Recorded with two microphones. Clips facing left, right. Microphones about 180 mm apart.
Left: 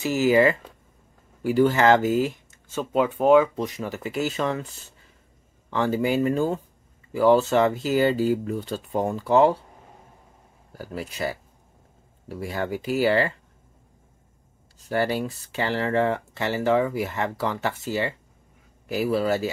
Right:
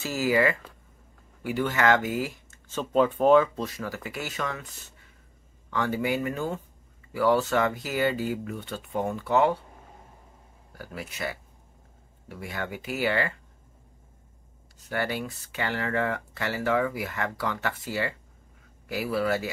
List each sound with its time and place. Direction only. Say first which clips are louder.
0.0 s speech: left 5 dB; 20° left (ahead or behind)
10.7 s speech: left 5 dB; 30° left (ahead or behind)
14.9 s speech: left 6 dB; 30° left (ahead or behind)